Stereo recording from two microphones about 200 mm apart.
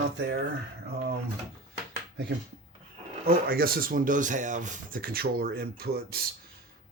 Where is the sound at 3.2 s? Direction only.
45° right (ahead or behind).